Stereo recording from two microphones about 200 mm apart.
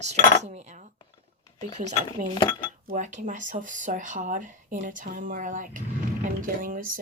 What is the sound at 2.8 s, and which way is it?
Speech, 40° right (ahead or behind).